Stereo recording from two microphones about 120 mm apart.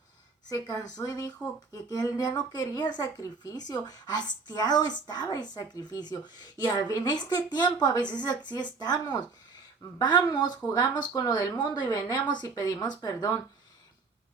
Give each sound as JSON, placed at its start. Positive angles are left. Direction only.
{"t": 0.5, "sound": "speech", "side_deg": 30}